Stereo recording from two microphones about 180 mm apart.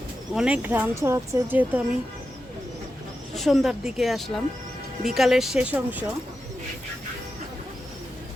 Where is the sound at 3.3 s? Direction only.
Centre (ahead or behind).